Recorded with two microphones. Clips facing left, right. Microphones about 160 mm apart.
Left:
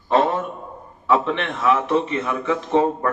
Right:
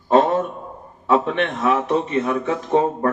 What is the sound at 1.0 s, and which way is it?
Speech, 40° right (ahead or behind).